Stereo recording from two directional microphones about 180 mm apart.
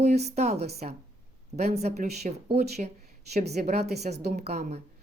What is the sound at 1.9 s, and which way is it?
Speech, 60° right (ahead or behind).